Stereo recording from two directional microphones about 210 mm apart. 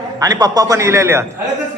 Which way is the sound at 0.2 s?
20° right (ahead or behind).